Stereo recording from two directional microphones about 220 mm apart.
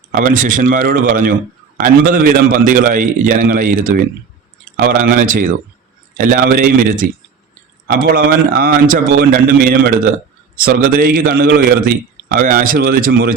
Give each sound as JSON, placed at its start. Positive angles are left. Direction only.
{"t": 0.1, "sound": "a man's voice", "side_deg": -35}